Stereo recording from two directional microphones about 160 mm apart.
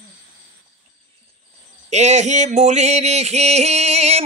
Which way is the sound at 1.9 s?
45° right (ahead or behind).